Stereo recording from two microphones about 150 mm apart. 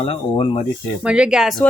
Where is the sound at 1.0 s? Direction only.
5° right (ahead or behind).